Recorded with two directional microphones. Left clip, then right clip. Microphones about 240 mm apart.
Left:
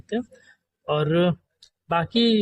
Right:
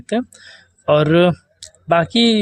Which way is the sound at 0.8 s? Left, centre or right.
Right.